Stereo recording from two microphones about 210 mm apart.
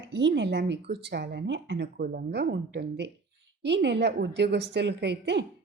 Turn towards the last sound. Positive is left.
turn(degrees=-55)  # may be behind; listen again after turning